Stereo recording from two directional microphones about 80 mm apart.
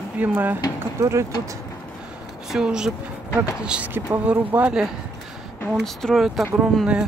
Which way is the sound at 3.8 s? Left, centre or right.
Right.